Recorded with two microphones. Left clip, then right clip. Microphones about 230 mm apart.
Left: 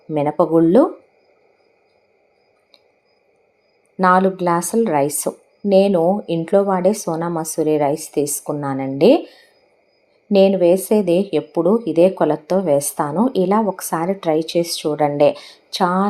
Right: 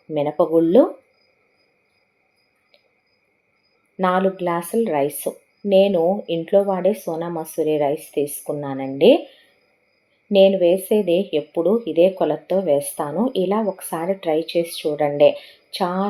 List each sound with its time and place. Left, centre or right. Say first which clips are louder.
0.1 s speech: left 2 dB; left
3.9 s speech: left 5 dB; left
10.2 s speech: left 1 dB; left